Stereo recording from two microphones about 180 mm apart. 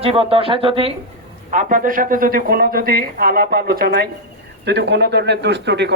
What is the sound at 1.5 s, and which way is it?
A man's voice, 45° right (ahead or behind).